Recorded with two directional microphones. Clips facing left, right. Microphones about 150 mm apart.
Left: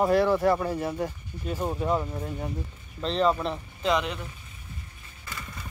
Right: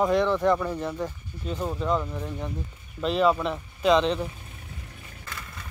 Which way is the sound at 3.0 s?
5° right (ahead or behind).